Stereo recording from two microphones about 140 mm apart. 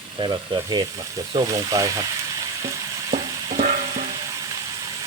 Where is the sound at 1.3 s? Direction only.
30° right (ahead or behind).